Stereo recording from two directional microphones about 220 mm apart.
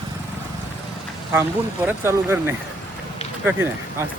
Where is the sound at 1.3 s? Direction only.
10° right (ahead or behind).